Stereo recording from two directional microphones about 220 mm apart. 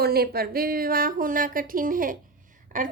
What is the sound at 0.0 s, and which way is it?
A woman's voice, 45° right (ahead or behind).